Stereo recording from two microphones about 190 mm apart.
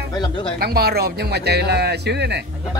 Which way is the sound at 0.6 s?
55° right (ahead or behind).